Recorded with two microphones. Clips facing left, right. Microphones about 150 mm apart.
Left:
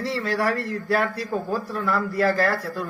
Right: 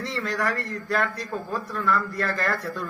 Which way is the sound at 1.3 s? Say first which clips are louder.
Left 4 dB; 35° left (ahead or behind).